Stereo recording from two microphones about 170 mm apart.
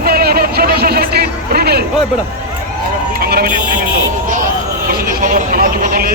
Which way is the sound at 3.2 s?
65° right (ahead or behind).